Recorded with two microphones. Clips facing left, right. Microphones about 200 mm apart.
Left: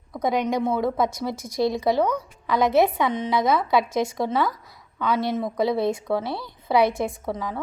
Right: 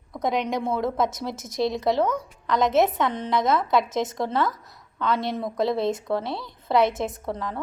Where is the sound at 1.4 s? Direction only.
20° right (ahead or behind).